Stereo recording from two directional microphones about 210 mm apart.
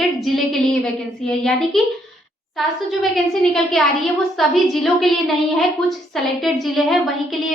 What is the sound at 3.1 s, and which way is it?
A woman's voice, centre (ahead or behind).